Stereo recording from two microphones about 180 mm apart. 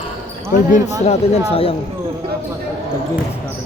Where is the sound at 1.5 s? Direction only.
30° left (ahead or behind).